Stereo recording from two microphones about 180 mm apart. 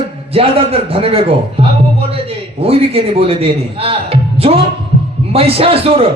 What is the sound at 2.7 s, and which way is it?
A man's voice, 35° right (ahead or behind).